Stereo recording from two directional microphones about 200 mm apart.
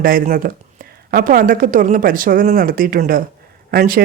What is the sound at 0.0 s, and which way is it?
A man's voice, 45° right (ahead or behind).